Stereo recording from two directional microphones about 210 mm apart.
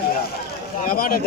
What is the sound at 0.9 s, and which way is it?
Speech, 45° left (ahead or behind).